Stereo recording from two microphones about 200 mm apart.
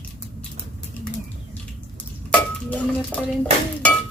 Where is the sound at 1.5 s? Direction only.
5° left (ahead or behind).